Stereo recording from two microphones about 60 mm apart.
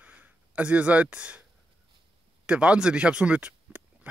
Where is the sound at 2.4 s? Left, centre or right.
Centre.